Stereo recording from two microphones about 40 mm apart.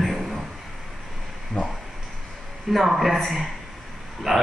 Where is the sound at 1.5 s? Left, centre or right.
Left.